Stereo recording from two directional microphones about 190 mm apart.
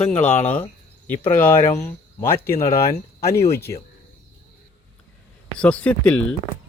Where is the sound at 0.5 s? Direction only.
10° left (ahead or behind).